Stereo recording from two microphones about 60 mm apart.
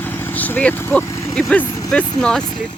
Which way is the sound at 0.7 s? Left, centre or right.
Left.